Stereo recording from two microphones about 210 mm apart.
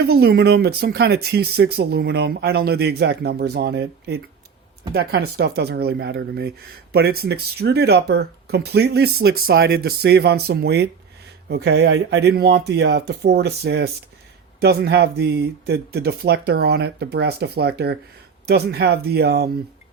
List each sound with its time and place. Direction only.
0.1 s speech: 45° right (ahead or behind)